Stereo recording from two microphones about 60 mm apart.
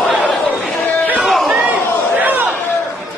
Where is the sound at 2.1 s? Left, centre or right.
Right.